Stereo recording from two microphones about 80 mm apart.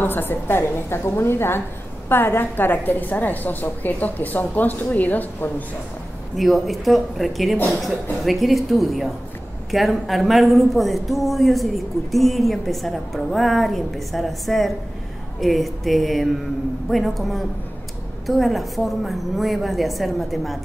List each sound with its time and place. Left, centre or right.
0.0 s a woman's voice: left
6.3 s speech: centre